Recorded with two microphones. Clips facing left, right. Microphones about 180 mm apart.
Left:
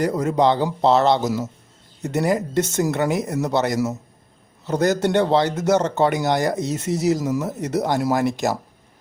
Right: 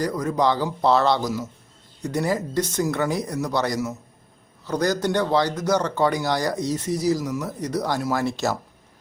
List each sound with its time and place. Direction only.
0.0 s speech: 25° left (ahead or behind)